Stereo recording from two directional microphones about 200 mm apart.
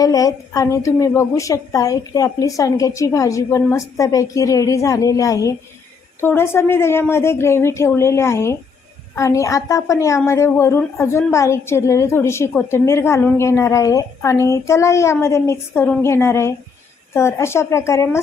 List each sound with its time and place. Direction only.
0.0 s a woman's voice: 15° left (ahead or behind)